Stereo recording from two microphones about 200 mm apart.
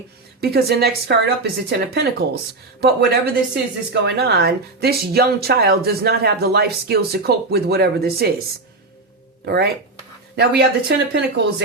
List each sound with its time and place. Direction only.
0.4 s speech: 55° right (ahead or behind)
9.5 s speech: 50° right (ahead or behind)